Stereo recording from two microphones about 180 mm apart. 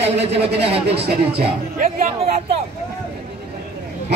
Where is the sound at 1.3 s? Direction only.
50° right (ahead or behind).